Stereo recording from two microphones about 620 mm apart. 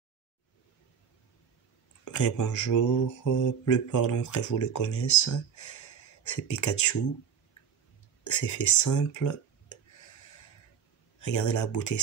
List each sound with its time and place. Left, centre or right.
2.0 s speech: left
8.2 s speech: left
11.1 s speech: left